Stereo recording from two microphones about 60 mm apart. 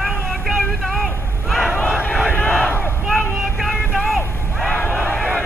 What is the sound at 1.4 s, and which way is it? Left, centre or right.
Crowd, centre.